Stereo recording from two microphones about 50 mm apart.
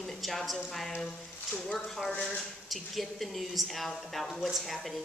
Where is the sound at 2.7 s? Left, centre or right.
Centre.